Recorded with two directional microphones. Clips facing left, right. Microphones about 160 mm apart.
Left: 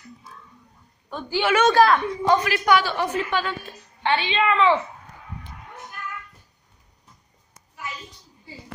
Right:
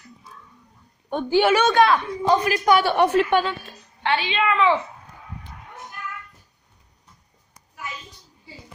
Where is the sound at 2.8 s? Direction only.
60° right (ahead or behind).